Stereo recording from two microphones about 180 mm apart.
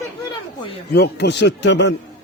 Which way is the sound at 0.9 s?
65° left (ahead or behind).